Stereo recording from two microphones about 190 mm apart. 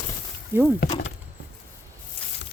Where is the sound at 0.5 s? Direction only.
15° right (ahead or behind).